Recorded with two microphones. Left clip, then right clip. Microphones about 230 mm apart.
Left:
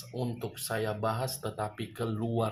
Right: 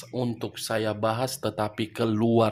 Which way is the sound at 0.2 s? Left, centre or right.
Right.